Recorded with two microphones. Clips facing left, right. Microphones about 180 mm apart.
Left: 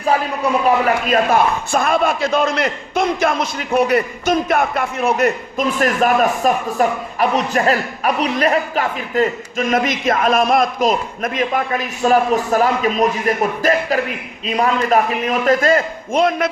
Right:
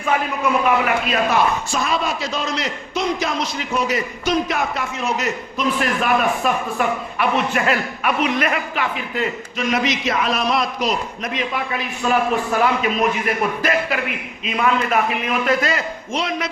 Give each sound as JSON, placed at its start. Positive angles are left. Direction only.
{"t": 0.0, "sound": "a man's voice", "side_deg": 35}